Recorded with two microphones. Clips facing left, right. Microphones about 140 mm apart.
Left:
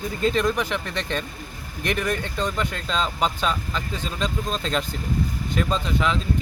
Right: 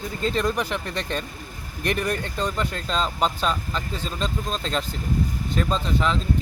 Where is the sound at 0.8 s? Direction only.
40° right (ahead or behind).